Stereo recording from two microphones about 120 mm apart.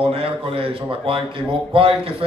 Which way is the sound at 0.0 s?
50° right (ahead or behind).